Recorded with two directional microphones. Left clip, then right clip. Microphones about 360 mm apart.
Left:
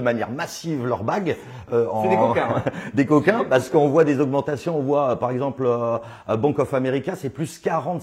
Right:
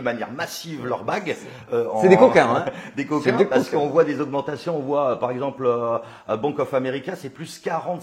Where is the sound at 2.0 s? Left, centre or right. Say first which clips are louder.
Right 9 dB; right.